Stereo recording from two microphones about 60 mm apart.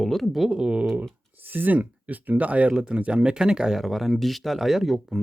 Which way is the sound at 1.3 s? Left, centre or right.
Right.